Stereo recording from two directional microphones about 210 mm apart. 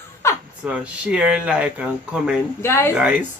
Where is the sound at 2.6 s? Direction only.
10° left (ahead or behind).